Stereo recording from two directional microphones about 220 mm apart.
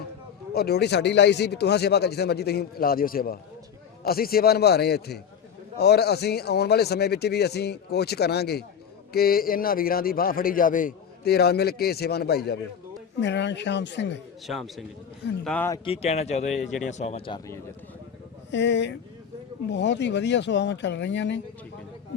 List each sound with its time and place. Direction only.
0.5 s a man's voice: 45° left (ahead or behind)
14.4 s a man's voice: centre (ahead or behind)
15.8 s a man's voice: 25° left (ahead or behind)
18.5 s a man's voice: 55° left (ahead or behind)